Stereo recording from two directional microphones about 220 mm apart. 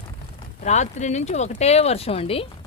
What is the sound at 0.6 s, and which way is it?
Speech, 30° left (ahead or behind).